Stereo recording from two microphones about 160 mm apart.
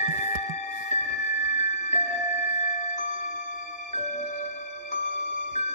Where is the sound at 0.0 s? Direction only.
50° left (ahead or behind).